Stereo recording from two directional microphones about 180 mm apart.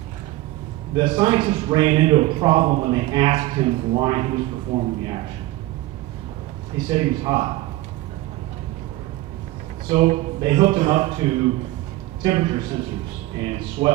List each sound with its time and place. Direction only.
0.9 s a man's voice: 30° right (ahead or behind)
6.7 s speech: 30° right (ahead or behind)
9.9 s a man's voice: 35° right (ahead or behind)
12.3 s a man's voice: 30° right (ahead or behind)
13.8 s speech: 25° right (ahead or behind)